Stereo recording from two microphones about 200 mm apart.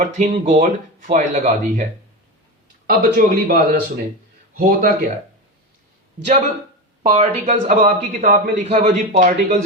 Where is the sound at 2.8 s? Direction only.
45° right (ahead or behind).